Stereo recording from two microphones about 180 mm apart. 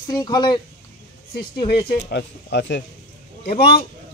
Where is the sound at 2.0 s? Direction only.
70° left (ahead or behind).